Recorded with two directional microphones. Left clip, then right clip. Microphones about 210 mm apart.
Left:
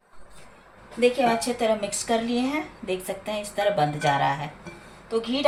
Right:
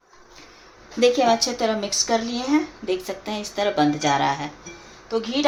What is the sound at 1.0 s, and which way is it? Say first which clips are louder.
A woman's voice: right 4 dB; 35° right (ahead or behind).